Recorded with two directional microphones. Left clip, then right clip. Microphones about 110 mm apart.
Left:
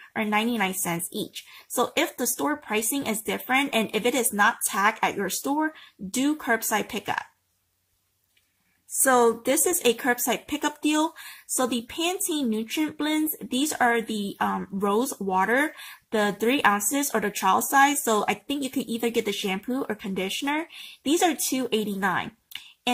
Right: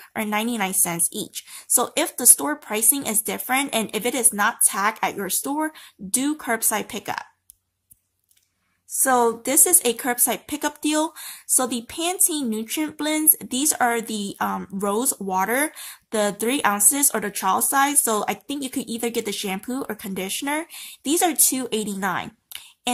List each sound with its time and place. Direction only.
0.3 s speech: 10° right (ahead or behind)
9.0 s a woman's voice: 20° right (ahead or behind)
9.7 s speech: 5° right (ahead or behind)